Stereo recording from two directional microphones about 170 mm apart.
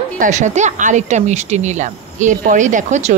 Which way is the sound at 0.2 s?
45° right (ahead or behind).